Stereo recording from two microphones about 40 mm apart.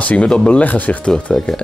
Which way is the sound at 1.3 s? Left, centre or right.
Centre.